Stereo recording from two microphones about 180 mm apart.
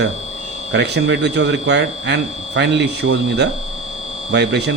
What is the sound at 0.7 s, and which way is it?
Speech, 70° right (ahead or behind).